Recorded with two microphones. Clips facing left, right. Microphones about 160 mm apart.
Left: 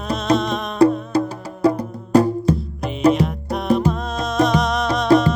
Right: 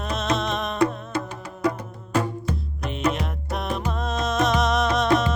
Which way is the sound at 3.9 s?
Centre (ahead or behind).